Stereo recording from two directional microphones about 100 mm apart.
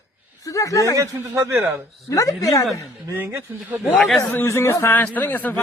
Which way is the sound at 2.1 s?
35° left (ahead or behind).